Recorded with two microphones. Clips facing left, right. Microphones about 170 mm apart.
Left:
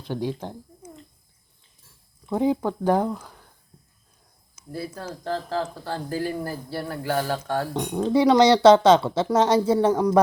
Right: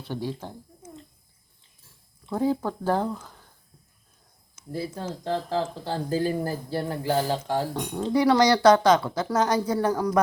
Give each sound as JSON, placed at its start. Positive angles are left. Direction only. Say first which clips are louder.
{"t": 0.0, "sound": "speech", "louder": "left 3 dB", "side_deg": 15}
{"t": 2.3, "sound": "speech", "louder": "left 3 dB", "side_deg": 15}
{"t": 4.7, "sound": "speech", "louder": "right 1 dB", "side_deg": -20}
{"t": 6.4, "sound": "speech", "louder": "right 2 dB", "side_deg": -35}
{"t": 6.8, "sound": "speech", "louder": "even", "side_deg": -20}
{"t": 7.7, "sound": "speech", "louder": "left 3 dB", "side_deg": 20}